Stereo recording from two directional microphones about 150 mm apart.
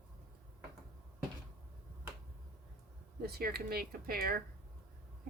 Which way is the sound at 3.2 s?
90° right.